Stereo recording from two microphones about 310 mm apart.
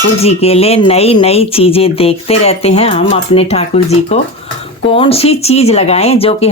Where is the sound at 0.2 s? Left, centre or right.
Centre.